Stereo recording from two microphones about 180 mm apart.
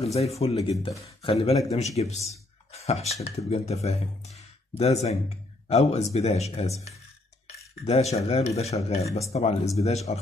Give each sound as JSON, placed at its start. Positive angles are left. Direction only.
{"t": 0.0, "sound": "speech", "side_deg": 35}